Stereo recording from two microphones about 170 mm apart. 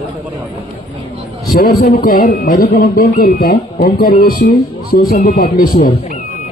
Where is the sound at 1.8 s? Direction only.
60° left (ahead or behind).